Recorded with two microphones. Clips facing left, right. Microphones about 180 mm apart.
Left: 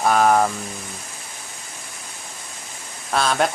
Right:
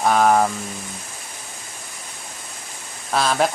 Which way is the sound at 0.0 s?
Centre (ahead or behind).